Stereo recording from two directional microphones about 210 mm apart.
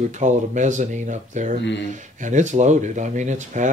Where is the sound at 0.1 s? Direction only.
35° right (ahead or behind).